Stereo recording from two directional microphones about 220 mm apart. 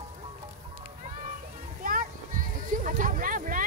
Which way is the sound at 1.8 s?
40° right (ahead or behind).